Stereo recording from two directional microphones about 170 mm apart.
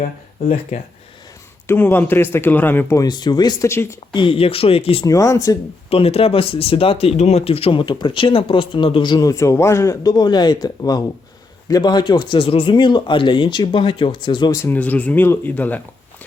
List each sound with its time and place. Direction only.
0.0 s speech: 40° left (ahead or behind)
1.6 s speech: 10° left (ahead or behind)
4.1 s speech: 30° left (ahead or behind)
5.0 s speech: 20° left (ahead or behind)
5.9 s speech: 35° left (ahead or behind); by 15.8 s 10° left (ahead or behind)